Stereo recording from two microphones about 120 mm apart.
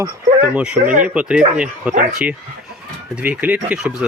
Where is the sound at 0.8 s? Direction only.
90° right.